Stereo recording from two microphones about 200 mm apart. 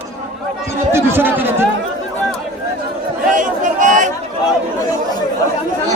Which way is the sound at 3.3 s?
40° right (ahead or behind).